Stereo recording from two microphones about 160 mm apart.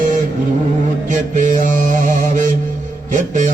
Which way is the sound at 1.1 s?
50° right (ahead or behind).